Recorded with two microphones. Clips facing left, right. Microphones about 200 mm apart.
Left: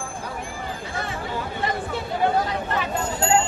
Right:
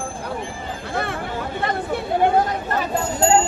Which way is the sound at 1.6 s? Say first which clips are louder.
Right 2 dB; 60° right (ahead or behind).